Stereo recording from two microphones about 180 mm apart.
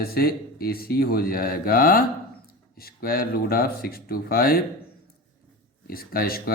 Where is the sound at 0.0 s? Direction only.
55° left (ahead or behind).